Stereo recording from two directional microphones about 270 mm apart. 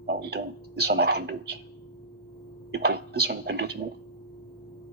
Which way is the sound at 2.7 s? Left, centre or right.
Right.